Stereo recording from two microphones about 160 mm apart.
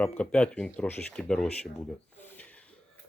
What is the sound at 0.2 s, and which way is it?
Speech, 5° left (ahead or behind).